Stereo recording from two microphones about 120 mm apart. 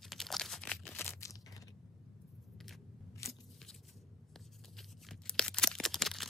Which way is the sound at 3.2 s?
25° left (ahead or behind).